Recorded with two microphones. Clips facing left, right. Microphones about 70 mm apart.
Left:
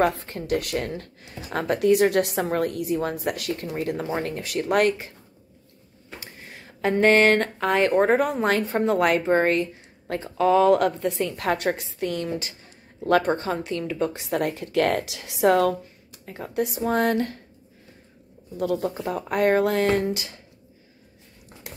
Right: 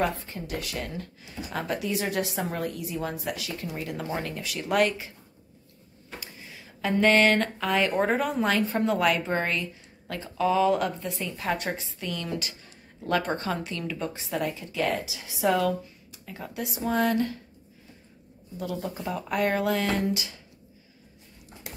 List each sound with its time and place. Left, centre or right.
0.0 s speech: left
3.6 s speech: left
6.2 s speech: left
16.3 s speech: left
18.6 s speech: left